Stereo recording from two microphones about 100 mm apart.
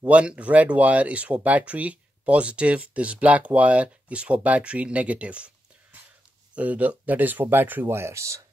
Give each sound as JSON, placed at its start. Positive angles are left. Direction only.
{"t": 0.0, "sound": "speech", "side_deg": -10}
{"t": 6.5, "sound": "speech", "side_deg": -15}